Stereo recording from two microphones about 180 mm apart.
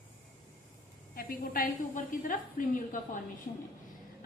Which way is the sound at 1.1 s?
55° left (ahead or behind).